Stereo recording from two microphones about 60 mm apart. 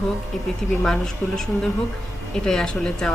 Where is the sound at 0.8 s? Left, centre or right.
Centre.